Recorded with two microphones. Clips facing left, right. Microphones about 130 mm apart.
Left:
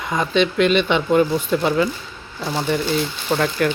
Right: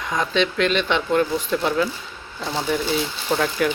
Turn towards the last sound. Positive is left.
turn(degrees=0)  # may be behind; listen again after turning